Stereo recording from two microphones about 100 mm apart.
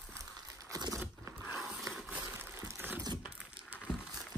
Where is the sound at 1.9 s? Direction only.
15° right (ahead or behind).